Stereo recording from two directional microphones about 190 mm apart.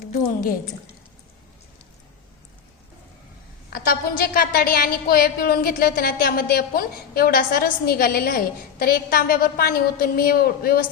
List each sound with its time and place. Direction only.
3.7 s a woman's voice: 50° left (ahead or behind)